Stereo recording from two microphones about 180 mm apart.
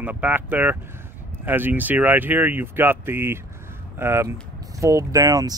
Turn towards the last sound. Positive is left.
turn(degrees=-20)  # may be behind; listen again after turning